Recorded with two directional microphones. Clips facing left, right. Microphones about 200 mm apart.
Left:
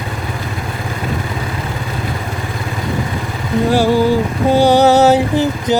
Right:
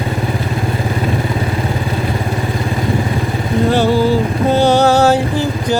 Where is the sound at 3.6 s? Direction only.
10° left (ahead or behind).